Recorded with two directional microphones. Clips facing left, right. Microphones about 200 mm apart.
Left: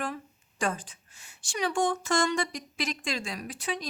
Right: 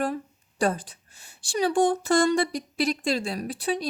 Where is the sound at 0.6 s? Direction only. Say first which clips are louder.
Right 6 dB; 35° right (ahead or behind).